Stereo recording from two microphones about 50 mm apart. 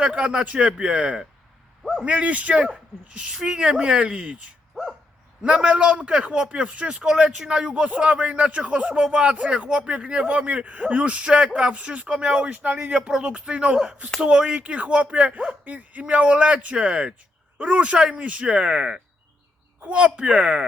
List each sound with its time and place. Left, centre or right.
0.0 s speech: right
1.8 s speech: centre
2.0 s speech: right
4.7 s dog: centre
5.5 s speech: right
6.9 s speech: centre